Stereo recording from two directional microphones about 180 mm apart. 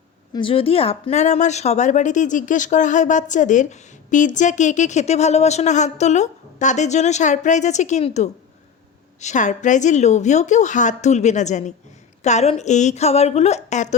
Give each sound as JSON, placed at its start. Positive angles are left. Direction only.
{"t": 0.3, "sound": "speech", "side_deg": 30}